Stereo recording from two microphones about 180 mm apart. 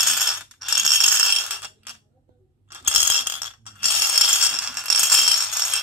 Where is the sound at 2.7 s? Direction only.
10° right (ahead or behind).